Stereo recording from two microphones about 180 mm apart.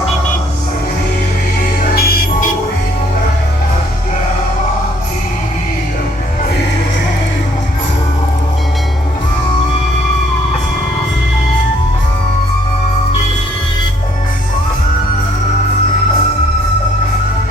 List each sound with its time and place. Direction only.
2.0 s music: 55° left (ahead or behind)